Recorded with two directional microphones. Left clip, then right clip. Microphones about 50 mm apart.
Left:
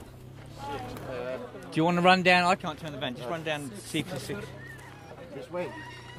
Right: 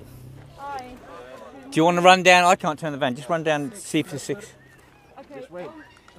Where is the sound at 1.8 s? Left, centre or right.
Right.